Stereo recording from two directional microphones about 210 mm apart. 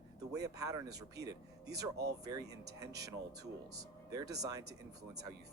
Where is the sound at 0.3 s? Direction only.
15° right (ahead or behind).